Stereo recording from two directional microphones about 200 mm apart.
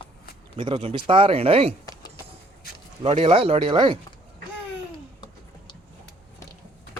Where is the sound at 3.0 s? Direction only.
30° right (ahead or behind).